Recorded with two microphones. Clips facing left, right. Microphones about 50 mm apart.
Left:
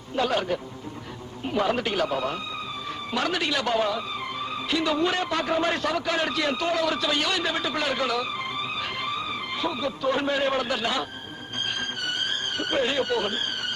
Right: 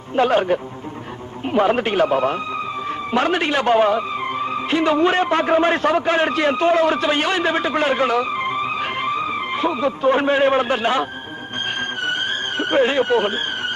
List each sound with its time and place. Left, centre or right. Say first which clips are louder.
0.2 s speech: right 8 dB; right
12.5 s speech: right 8 dB; right